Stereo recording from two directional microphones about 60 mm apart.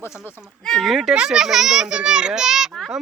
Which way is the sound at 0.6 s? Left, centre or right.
Centre.